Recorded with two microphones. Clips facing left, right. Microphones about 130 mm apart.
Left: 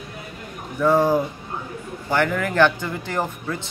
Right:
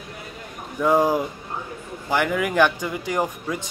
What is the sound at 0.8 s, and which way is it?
Speech, 15° right (ahead or behind).